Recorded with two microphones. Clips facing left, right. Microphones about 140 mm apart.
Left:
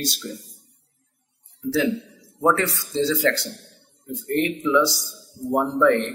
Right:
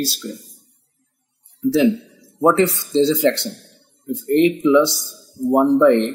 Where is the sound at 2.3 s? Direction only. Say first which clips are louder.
Right 6 dB; 25° right (ahead or behind).